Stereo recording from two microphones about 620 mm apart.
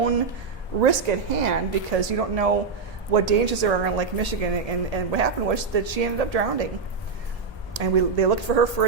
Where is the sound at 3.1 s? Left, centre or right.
Right.